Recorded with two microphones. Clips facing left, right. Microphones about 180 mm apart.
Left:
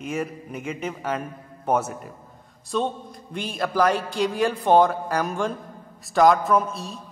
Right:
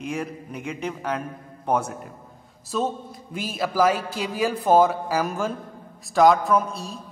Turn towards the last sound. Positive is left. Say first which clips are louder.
# even
turn(degrees=0)  # may be behind; listen again after turning